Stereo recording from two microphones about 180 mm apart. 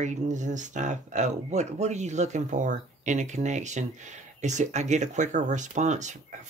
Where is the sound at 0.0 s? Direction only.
45° right (ahead or behind).